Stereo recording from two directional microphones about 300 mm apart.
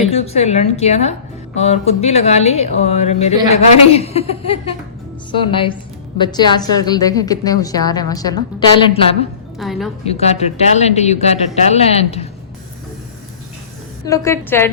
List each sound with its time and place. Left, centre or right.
0.1 s a woman's voice: left
9.6 s a woman's voice: centre
10.0 s a woman's voice: left
14.0 s a woman's voice: centre